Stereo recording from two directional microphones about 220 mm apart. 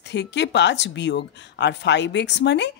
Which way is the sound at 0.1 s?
50° left (ahead or behind).